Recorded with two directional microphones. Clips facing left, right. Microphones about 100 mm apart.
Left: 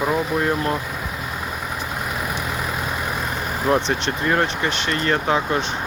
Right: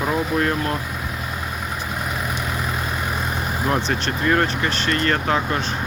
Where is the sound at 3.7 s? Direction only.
20° left (ahead or behind).